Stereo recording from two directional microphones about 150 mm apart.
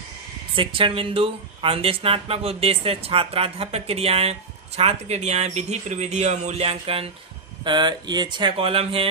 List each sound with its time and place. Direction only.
0.5 s speech: 35° right (ahead or behind)